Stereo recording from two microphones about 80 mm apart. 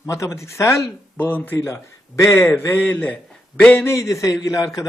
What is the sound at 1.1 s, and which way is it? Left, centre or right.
Speech, left.